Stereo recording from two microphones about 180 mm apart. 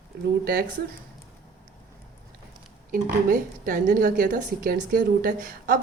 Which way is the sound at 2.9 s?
55° right (ahead or behind).